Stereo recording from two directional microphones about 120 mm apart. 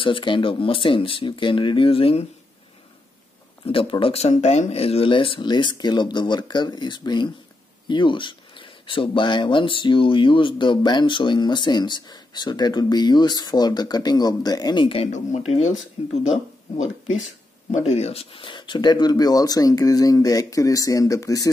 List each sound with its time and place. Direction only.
0.0 s speech: 45° left (ahead or behind)
3.6 s speech: 50° left (ahead or behind)
15.1 s speech: 65° left (ahead or behind); by 21.5 s 30° left (ahead or behind)